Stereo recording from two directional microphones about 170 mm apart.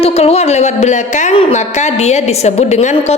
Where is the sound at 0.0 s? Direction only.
35° left (ahead or behind).